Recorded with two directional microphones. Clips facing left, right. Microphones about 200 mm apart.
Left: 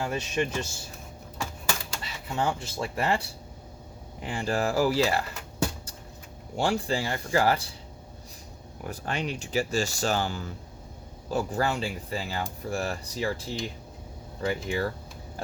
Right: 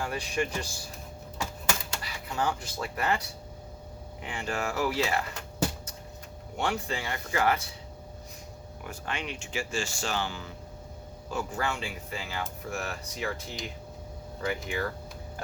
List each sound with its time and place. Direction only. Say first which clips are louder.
0.0 s speech: left 2 dB; 25° left (ahead or behind)
2.0 s speech: left 2 dB; 25° left (ahead or behind)
6.6 s speech: left 5 dB; 30° left (ahead or behind)
8.8 s speech: left 5 dB; 40° left (ahead or behind)